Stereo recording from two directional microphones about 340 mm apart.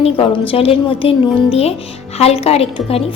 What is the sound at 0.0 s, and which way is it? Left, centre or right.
A woman's voice, centre.